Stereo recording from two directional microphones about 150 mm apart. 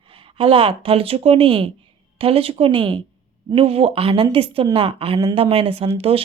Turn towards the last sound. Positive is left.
turn(degrees=-40)  # may be behind; listen again after turning